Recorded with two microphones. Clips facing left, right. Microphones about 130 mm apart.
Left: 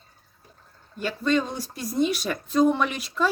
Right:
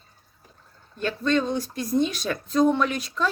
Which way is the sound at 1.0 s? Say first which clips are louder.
Right 1 dB; 5° left (ahead or behind).